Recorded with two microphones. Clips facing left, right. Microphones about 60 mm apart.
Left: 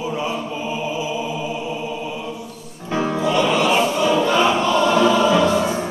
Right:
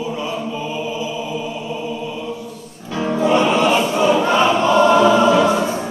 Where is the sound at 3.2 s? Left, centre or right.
Right.